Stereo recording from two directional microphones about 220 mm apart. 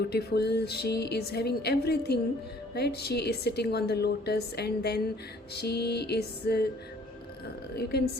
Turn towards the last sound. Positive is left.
turn(degrees=45)  # may be behind; listen again after turning